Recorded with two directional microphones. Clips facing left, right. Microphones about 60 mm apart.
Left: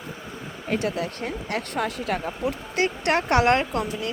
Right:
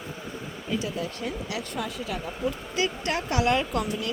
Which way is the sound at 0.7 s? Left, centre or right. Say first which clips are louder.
Left 4 dB; left.